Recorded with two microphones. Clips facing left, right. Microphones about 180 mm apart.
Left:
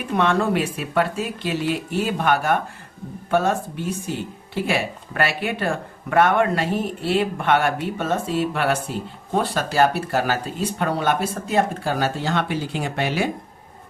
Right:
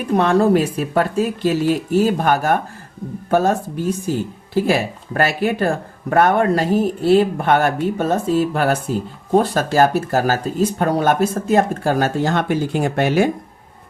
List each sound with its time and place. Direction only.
0.2 s speech: 35° right (ahead or behind)